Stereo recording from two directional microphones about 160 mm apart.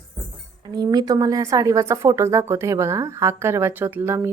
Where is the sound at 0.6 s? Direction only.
25° right (ahead or behind).